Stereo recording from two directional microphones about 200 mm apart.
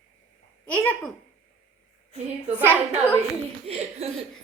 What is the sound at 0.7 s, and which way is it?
Speech, 10° left (ahead or behind).